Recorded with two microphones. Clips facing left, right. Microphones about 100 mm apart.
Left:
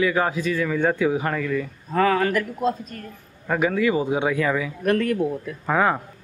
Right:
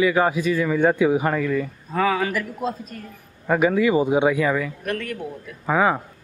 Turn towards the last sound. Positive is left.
turn(degrees=-5)  # may be behind; listen again after turning